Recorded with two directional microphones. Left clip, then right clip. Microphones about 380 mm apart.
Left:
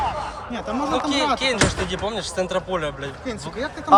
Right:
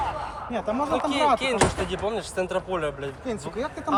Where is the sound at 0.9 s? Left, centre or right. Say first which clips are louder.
Left 1 dB; centre.